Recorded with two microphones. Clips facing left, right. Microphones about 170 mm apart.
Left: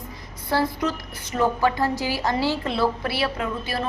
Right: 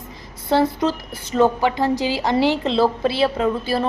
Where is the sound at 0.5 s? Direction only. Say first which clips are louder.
Right 5 dB; 25° right (ahead or behind).